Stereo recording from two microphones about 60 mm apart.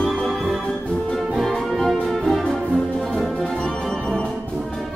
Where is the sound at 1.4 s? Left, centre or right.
Centre.